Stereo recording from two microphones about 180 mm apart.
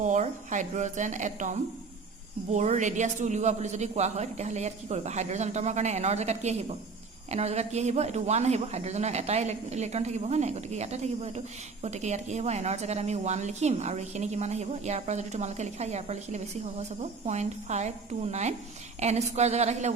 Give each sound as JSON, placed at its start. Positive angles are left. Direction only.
{"t": 0.0, "sound": "a woman's voice", "side_deg": -45}